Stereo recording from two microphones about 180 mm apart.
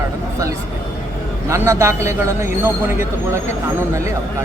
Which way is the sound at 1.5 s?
15° right (ahead or behind).